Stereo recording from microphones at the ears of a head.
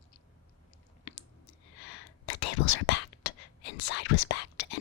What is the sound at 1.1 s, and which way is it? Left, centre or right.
Whispering, left.